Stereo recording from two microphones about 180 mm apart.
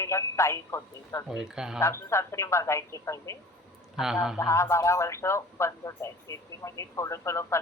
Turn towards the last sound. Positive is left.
turn(degrees=15)  # may be behind; listen again after turning